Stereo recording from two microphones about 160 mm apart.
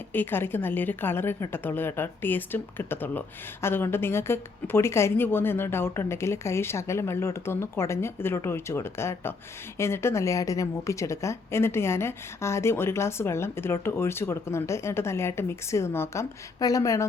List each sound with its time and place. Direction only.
0.1 s a woman's voice: 10° left (ahead or behind)